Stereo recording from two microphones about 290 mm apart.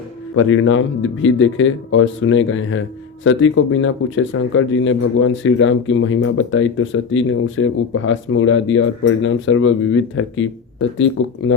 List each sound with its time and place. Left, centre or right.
0.3 s speech: left